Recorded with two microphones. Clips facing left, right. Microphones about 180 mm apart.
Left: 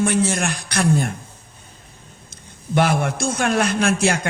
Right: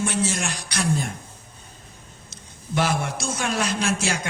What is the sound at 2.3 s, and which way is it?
Speech, 55° left (ahead or behind).